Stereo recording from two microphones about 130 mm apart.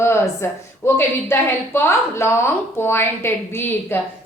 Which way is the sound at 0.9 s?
20° left (ahead or behind).